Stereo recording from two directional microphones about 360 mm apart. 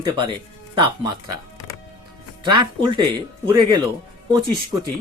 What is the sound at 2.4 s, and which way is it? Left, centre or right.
Speech, centre.